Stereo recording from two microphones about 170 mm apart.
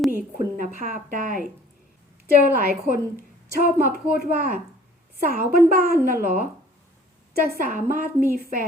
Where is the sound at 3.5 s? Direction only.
60° right (ahead or behind).